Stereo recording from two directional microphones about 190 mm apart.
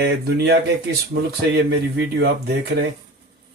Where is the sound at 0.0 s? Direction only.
65° right (ahead or behind).